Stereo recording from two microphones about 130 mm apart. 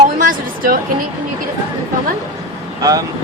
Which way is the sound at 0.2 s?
90° right.